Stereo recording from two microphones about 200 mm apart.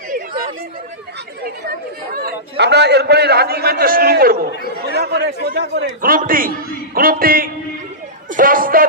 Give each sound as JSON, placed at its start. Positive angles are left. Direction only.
{"t": 2.1, "sound": "a man's voice", "side_deg": -55}
{"t": 5.8, "sound": "a man's voice", "side_deg": -45}